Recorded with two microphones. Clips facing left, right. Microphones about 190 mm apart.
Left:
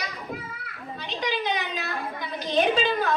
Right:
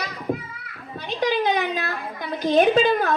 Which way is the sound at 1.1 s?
50° right (ahead or behind).